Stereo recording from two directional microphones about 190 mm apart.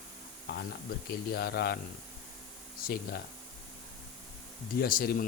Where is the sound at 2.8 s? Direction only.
55° left (ahead or behind).